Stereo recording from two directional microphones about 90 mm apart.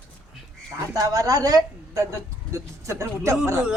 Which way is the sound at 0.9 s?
40° right (ahead or behind).